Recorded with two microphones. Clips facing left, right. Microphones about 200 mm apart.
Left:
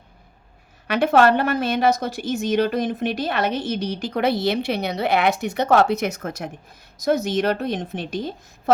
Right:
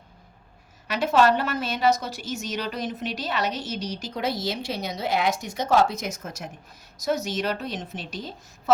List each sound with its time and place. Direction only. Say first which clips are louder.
0.9 s a woman's voice: left 4 dB; 60° left (ahead or behind)